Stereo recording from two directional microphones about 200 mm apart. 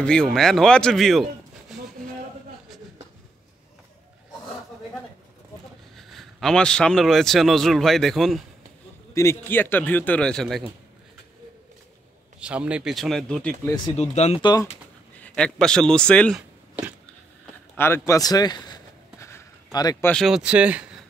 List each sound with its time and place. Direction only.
0.0 s speech: 5° left (ahead or behind)
5.9 s a man's voice: centre (ahead or behind)
9.1 s a man's voice: 15° left (ahead or behind)
12.4 s speech: 5° right (ahead or behind)
13.9 s speech: 35° left (ahead or behind)
15.1 s speech: 5° left (ahead or behind)
17.7 s a sound: 10° left (ahead or behind)
20.1 s speech: centre (ahead or behind)